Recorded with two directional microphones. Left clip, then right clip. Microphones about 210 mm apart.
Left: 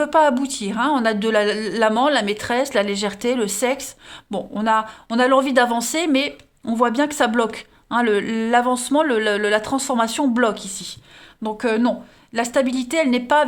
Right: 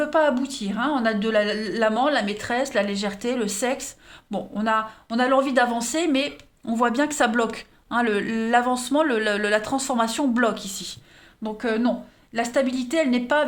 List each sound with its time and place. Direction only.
0.0 s speech: 40° left (ahead or behind); by 10.9 s 20° left (ahead or behind)
11.4 s speech: 40° left (ahead or behind)